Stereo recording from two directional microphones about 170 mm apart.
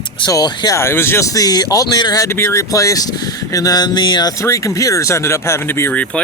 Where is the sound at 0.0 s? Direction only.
25° left (ahead or behind).